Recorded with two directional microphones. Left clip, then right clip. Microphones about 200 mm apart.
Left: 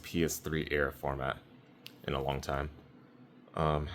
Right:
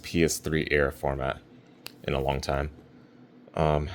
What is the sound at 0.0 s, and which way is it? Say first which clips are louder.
Speech: right 8 dB; 20° right (ahead or behind).